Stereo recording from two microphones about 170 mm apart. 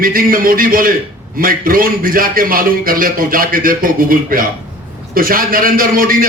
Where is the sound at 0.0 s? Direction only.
55° right (ahead or behind).